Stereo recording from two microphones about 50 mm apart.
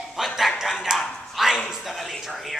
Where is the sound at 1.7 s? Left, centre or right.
Centre.